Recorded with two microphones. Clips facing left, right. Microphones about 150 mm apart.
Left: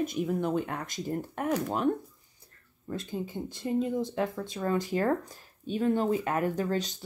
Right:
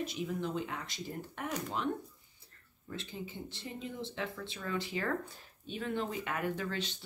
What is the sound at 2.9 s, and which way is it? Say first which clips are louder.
Speech: left 8 dB; 45° left (ahead or behind).